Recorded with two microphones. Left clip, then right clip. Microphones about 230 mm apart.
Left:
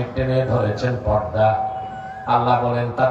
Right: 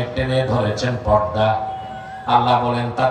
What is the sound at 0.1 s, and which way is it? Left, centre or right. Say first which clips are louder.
Speech: even; right.